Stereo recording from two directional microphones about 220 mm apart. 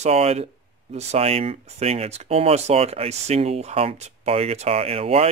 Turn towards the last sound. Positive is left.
turn(degrees=-25)  # may be behind; listen again after turning